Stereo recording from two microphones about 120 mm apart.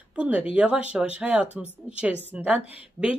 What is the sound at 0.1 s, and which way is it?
Speech, 10° right (ahead or behind).